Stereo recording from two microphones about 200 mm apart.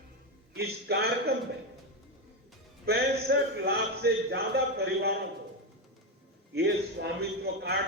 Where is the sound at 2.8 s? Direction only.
55° right (ahead or behind).